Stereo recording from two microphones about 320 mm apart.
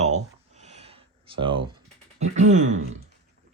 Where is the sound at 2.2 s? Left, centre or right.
Right.